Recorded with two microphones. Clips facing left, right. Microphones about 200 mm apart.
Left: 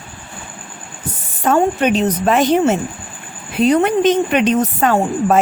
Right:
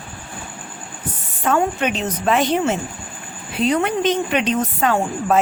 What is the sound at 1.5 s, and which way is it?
Speech, 40° left (ahead or behind).